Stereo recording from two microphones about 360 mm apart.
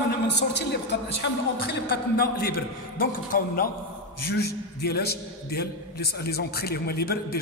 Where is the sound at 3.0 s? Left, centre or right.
Left.